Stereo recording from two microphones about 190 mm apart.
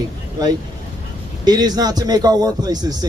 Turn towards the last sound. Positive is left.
turn(degrees=-20)  # may be behind; listen again after turning